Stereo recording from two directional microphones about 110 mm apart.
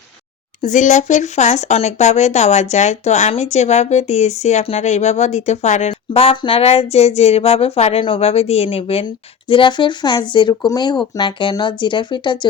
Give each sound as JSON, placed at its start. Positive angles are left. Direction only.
{"t": 0.6, "sound": "speech", "side_deg": 90}
{"t": 9.5, "sound": "speech", "side_deg": 45}